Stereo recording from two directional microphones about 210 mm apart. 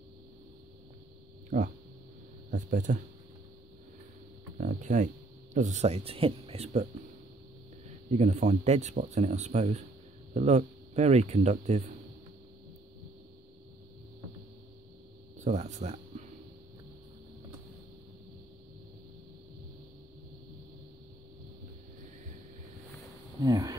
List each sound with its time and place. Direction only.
2.5 s speech: 35° right (ahead or behind)
4.6 s speech: 40° right (ahead or behind)
8.1 s speech: 30° right (ahead or behind)
15.3 s a sound: 35° right (ahead or behind)
23.4 s speech: 15° right (ahead or behind)